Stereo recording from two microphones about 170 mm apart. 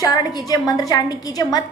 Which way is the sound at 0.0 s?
25° left (ahead or behind).